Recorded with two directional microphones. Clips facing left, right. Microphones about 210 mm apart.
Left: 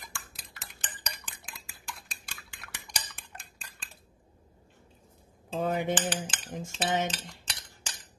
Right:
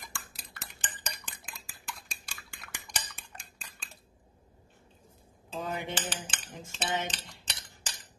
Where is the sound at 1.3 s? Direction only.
Centre (ahead or behind).